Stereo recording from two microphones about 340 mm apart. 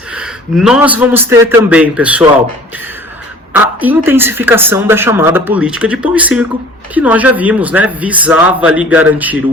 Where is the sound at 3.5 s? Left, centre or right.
Centre.